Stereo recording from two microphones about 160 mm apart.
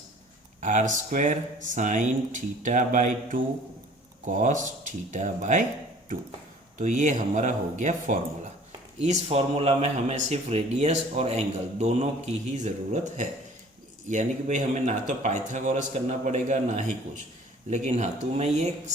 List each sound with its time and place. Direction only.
0.6 s speech: 55° right (ahead or behind)
6.7 s speech: 50° right (ahead or behind)
9.0 s speech: 40° right (ahead or behind)